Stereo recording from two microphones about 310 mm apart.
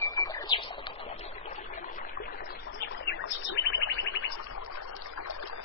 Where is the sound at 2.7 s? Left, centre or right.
Left.